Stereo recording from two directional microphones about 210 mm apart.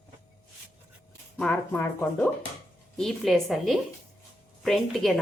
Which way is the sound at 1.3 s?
5° left (ahead or behind).